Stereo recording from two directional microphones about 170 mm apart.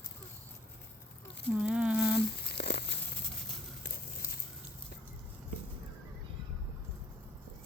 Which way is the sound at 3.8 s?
65° left (ahead or behind).